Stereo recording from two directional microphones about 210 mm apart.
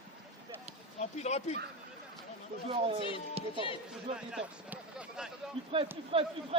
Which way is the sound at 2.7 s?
25° right (ahead or behind).